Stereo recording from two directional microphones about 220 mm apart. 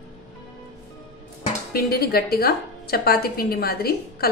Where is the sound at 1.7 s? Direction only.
45° left (ahead or behind).